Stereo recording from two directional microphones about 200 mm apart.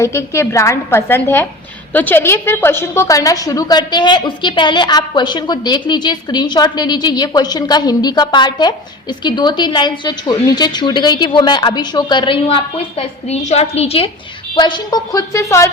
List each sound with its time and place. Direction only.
0.0 s a woman's voice: 15° left (ahead or behind)